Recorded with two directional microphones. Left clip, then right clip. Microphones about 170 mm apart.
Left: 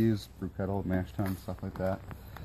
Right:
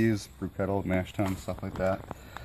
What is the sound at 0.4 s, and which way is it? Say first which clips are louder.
Speech: right 5 dB; 35° right (ahead or behind).